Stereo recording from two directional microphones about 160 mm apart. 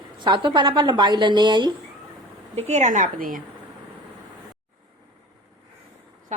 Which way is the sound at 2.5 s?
45° right (ahead or behind).